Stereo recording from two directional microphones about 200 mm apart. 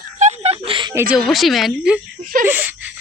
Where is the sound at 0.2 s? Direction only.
30° right (ahead or behind).